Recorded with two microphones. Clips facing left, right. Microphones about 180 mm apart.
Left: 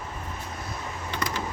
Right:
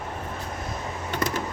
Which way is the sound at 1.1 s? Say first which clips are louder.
Right 4 dB; 50° right (ahead or behind).